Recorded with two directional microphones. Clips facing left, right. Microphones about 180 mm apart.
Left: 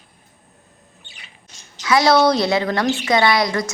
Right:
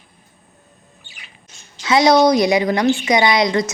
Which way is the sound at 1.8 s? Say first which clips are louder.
Right 2 dB; 20° right (ahead or behind).